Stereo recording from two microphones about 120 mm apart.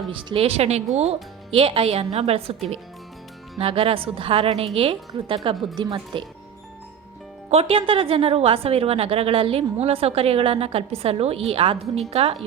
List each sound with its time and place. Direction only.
0.1 s speech: 45° right (ahead or behind)
3.6 s a woman's voice: 50° right (ahead or behind)
5.7 s speech: 40° right (ahead or behind)
7.5 s a woman's voice: 55° right (ahead or behind)